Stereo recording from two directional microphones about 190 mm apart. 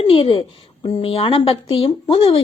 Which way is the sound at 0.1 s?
30° left (ahead or behind).